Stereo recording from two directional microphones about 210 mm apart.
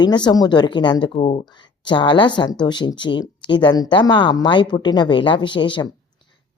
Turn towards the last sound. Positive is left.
turn(degrees=20)  # may be behind; listen again after turning